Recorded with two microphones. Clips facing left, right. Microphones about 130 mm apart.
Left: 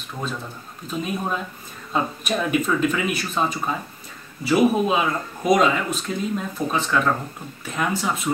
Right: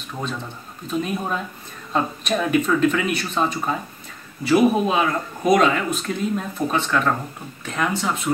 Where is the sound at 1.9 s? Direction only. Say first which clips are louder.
Right 1 dB; 5° left (ahead or behind).